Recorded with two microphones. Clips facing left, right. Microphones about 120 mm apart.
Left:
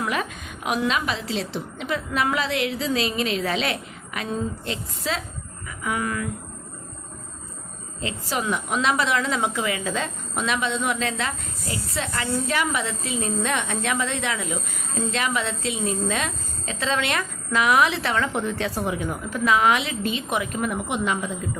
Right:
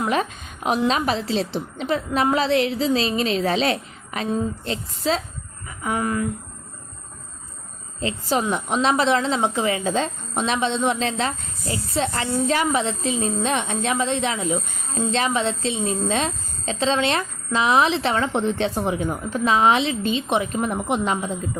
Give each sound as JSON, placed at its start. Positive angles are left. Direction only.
{"t": 0.0, "sound": "a woman's voice", "side_deg": -30}
{"t": 8.0, "sound": "a woman's voice", "side_deg": -30}